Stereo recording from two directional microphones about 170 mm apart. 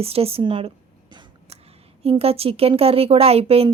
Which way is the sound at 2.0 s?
35° right (ahead or behind).